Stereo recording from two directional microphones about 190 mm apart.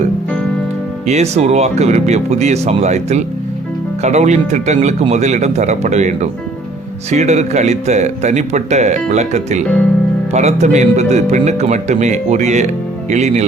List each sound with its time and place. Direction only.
1.0 s speech: 35° right (ahead or behind)